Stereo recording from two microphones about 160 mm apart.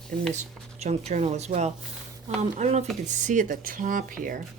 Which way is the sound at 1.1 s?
45° right (ahead or behind).